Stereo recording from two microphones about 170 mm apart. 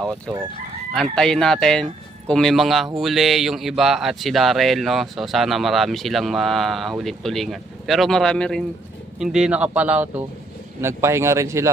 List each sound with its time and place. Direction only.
1.1 s speech: 5° left (ahead or behind); by 11.7 s 15° right (ahead or behind)